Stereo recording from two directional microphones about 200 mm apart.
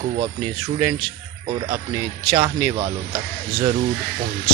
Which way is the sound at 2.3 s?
25° right (ahead or behind).